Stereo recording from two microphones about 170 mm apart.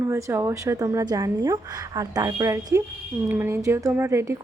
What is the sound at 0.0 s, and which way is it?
Speech, 15° right (ahead or behind).